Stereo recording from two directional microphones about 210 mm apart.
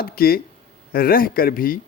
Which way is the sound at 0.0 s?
45° left (ahead or behind).